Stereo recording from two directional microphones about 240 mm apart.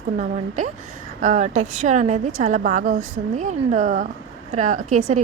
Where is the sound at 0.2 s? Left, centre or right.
Right.